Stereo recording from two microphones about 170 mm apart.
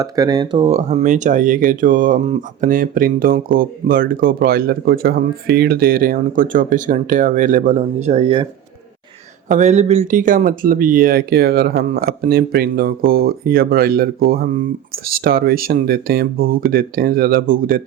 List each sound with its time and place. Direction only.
0.0 s speech: 20° right (ahead or behind)
0.7 s speech: 40° right (ahead or behind)
9.5 s speech: 45° right (ahead or behind)